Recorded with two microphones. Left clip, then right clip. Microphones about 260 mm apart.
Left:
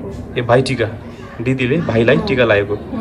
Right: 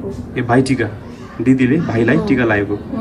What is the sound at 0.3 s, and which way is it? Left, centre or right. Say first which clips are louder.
A man's voice: left 1 dB; centre.